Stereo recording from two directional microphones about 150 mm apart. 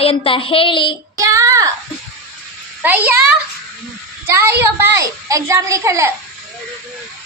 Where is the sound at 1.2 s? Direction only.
20° right (ahead or behind).